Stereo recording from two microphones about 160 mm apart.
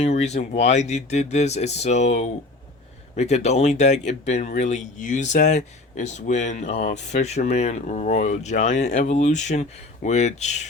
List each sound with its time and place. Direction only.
0.0 s speech: 45° left (ahead or behind)